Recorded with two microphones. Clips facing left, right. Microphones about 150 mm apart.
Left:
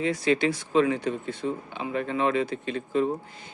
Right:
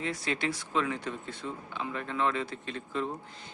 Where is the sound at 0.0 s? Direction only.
90° left.